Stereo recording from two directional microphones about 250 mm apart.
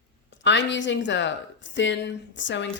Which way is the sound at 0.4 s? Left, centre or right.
Left.